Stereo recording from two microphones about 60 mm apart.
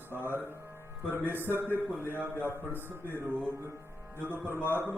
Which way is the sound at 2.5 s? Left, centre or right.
Left.